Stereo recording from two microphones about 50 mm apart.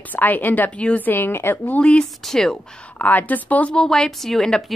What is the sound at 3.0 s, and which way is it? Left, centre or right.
Speech, left.